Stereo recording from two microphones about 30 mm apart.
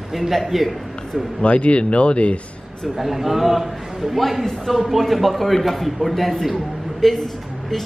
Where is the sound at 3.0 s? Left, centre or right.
Centre.